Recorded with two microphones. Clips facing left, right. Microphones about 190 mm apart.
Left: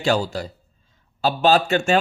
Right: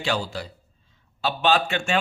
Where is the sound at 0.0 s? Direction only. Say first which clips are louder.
Left 6 dB; 40° left (ahead or behind).